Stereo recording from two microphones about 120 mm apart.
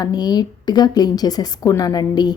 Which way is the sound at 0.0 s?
35° left (ahead or behind).